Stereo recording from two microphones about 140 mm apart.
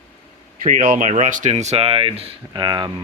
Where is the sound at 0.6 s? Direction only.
70° right (ahead or behind); by 2.3 s 45° right (ahead or behind).